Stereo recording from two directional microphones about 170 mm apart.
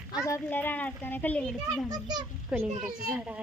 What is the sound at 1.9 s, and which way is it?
Speech, 25° right (ahead or behind).